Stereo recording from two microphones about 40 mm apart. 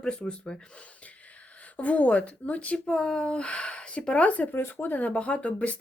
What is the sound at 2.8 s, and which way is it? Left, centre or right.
Speech, left.